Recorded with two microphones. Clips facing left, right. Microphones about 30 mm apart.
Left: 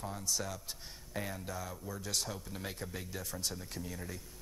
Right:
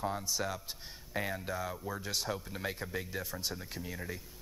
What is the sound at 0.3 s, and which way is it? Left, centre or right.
Speech, right.